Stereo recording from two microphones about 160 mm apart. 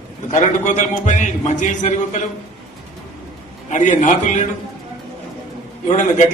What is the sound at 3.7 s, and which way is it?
Speech, 50° left (ahead or behind).